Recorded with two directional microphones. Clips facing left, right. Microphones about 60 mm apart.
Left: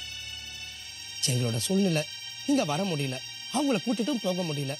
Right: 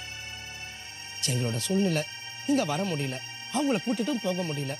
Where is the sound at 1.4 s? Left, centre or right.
Right.